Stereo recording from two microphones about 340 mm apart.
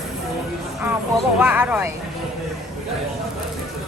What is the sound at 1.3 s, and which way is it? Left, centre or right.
Speech, centre.